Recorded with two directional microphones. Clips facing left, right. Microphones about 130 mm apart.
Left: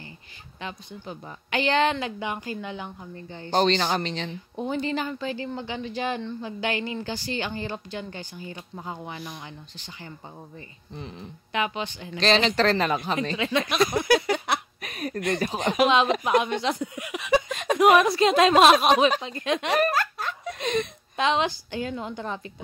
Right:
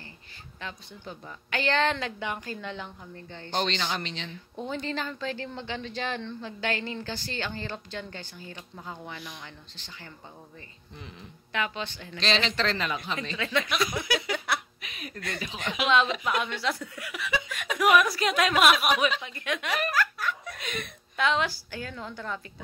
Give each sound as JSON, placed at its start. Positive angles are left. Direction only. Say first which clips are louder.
{"t": 0.6, "sound": "speech", "louder": "left 4 dB", "side_deg": 15}
{"t": 3.5, "sound": "speech", "louder": "left 7 dB", "side_deg": 40}
{"t": 4.3, "sound": "speech", "louder": "left 5 dB", "side_deg": 15}
{"t": 11.5, "sound": "speech", "louder": "left 4 dB", "side_deg": 15}
{"t": 12.2, "sound": "speech", "louder": "left 6 dB", "side_deg": 45}
{"t": 13.4, "sound": "speech", "louder": "left 3 dB", "side_deg": 20}
{"t": 13.7, "sound": "a sound", "louder": "left 7 dB", "side_deg": 45}
{"t": 14.3, "sound": "laughter", "louder": "left 4 dB", "side_deg": 20}
{"t": 14.8, "sound": "a sound", "louder": "left 10 dB", "side_deg": 45}
{"t": 15.3, "sound": "speech", "louder": "left 9 dB", "side_deg": 45}
{"t": 16.3, "sound": "speech", "louder": "left 6 dB", "side_deg": 20}